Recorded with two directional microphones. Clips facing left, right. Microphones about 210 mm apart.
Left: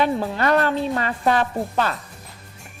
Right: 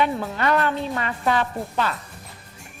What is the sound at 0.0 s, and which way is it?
A woman's voice, 35° left (ahead or behind).